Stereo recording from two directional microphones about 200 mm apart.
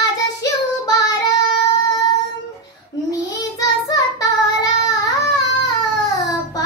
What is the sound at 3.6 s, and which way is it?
Child singing, 20° left (ahead or behind).